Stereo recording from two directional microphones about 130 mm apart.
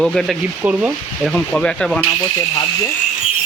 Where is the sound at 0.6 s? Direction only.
10° right (ahead or behind).